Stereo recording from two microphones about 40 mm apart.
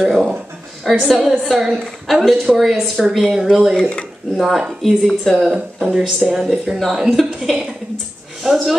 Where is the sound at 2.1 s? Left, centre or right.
Centre.